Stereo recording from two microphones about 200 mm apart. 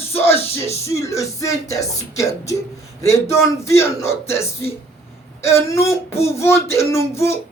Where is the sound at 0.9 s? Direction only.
15° left (ahead or behind).